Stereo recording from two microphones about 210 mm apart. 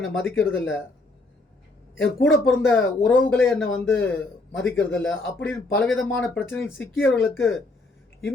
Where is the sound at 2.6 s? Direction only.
10° left (ahead or behind).